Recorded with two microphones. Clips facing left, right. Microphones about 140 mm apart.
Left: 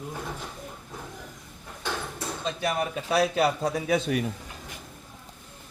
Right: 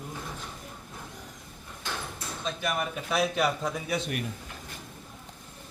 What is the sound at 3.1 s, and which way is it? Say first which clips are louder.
Speech: left 3 dB; 35° left (ahead or behind).